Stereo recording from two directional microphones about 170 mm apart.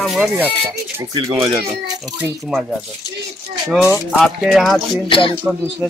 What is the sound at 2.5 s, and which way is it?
Speech, centre (ahead or behind).